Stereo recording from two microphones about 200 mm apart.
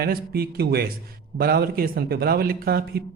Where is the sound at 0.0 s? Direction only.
50° right (ahead or behind).